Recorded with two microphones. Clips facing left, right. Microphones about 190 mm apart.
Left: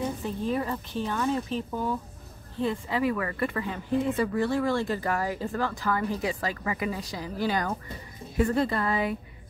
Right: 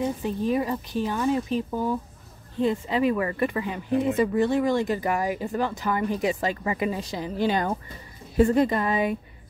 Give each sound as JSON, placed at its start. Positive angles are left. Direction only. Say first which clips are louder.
{"t": 0.2, "sound": "speech", "louder": "right 4 dB", "side_deg": -15}